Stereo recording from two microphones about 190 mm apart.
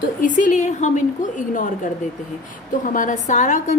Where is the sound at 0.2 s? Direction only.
45° left (ahead or behind).